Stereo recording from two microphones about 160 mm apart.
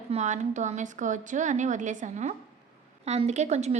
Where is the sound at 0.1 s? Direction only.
45° right (ahead or behind).